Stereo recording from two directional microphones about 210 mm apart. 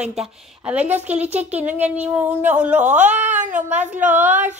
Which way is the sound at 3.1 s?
35° right (ahead or behind).